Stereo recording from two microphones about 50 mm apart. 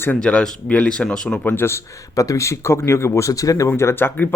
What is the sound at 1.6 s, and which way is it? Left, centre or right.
Speech, left.